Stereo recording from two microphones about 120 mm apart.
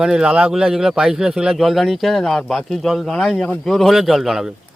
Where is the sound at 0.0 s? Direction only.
5° right (ahead or behind).